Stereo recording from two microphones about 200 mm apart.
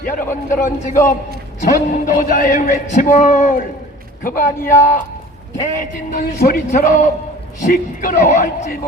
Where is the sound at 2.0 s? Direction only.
45° left (ahead or behind).